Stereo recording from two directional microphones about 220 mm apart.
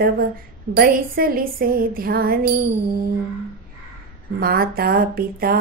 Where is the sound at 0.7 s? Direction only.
40° right (ahead or behind).